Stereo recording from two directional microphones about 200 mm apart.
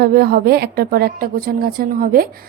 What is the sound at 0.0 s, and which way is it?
A woman's voice, 50° right (ahead or behind).